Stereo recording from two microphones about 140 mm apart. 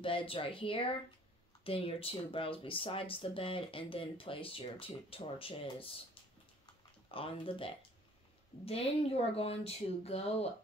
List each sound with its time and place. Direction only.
0.0 s speech: 40° left (ahead or behind)
7.1 s speech: 40° left (ahead or behind)